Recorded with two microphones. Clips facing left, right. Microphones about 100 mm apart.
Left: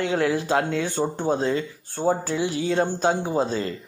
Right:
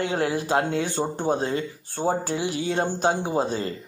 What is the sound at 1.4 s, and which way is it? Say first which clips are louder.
Speech: left 2 dB; 50° right (ahead or behind).